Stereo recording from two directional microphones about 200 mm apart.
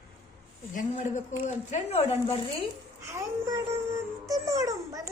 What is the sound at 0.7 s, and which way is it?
Speech, 40° left (ahead or behind).